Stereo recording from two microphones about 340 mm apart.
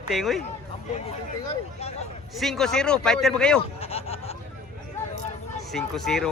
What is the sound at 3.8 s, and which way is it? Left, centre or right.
Speech, centre.